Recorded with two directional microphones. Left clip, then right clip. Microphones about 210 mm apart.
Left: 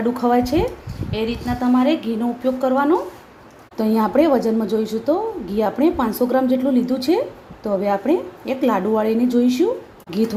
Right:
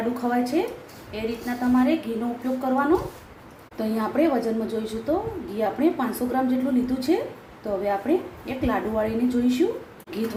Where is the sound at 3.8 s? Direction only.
50° left (ahead or behind).